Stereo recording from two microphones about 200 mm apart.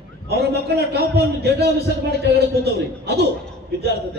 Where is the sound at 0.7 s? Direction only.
55° right (ahead or behind).